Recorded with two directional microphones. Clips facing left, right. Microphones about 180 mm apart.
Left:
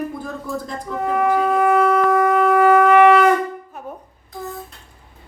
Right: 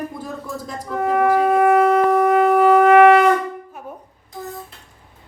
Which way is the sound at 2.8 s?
45° right (ahead or behind).